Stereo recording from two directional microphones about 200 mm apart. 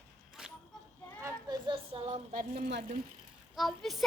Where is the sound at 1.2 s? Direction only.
15° right (ahead or behind); by 2.7 s 40° right (ahead or behind).